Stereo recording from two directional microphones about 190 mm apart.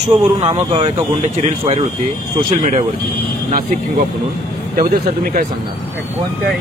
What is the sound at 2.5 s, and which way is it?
Speech, 40° right (ahead or behind).